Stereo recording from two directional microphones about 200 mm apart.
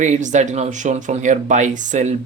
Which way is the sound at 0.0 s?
35° right (ahead or behind).